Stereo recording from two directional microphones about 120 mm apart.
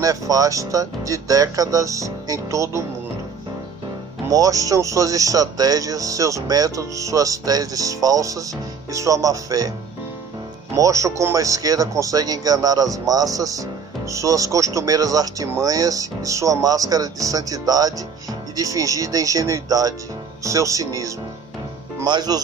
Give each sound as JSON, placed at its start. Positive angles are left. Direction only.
{"t": 0.0, "sound": "speech", "side_deg": -30}
{"t": 4.3, "sound": "speech", "side_deg": -30}
{"t": 10.8, "sound": "speech", "side_deg": -25}